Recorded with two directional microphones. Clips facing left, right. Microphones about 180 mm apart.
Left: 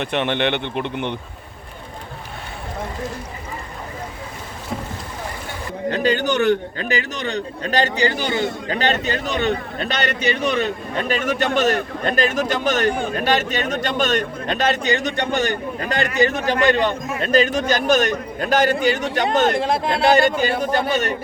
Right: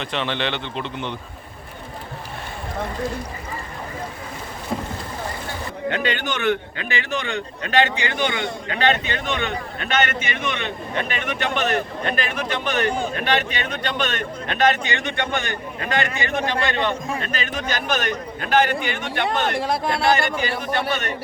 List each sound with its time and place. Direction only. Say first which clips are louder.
0.0 s a man's voice: left 5 dB; 55° left (ahead or behind)
5.9 s a man's voice: left 6 dB; 40° left (ahead or behind)
19.5 s speech: left 3 dB; 20° left (ahead or behind)
20.1 s a man's voice: left 7 dB; 40° left (ahead or behind)